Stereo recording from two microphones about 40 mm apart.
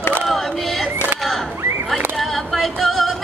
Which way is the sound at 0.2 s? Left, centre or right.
Centre.